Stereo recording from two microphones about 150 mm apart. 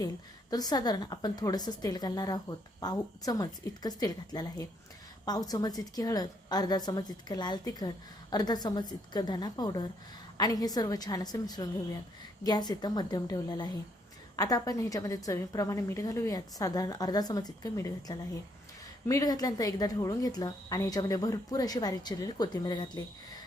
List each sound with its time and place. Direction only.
0.5 s a woman's voice: 25° left (ahead or behind)